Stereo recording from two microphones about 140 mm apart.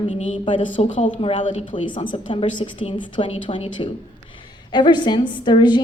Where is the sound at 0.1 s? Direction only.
45° left (ahead or behind).